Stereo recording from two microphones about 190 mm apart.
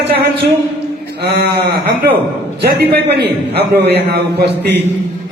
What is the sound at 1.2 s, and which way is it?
A man's voice, 55° right (ahead or behind).